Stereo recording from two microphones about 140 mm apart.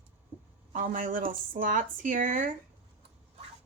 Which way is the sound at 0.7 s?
80° right.